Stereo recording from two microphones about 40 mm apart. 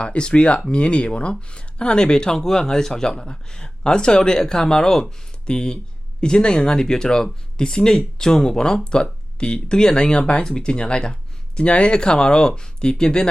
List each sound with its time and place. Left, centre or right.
0.0 s speech: left